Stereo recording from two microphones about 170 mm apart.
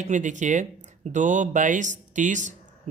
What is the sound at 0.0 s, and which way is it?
Speech, 45° right (ahead or behind).